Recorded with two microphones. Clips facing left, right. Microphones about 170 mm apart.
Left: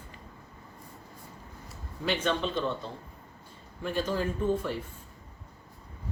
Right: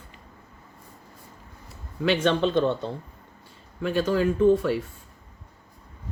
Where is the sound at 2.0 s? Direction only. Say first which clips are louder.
Right 7 dB; 75° right (ahead or behind).